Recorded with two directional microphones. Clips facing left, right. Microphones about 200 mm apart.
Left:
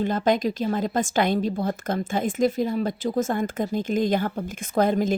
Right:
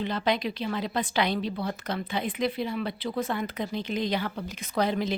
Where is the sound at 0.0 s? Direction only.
45° left (ahead or behind).